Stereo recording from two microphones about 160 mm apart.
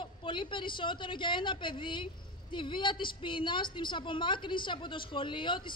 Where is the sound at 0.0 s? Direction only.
30° left (ahead or behind).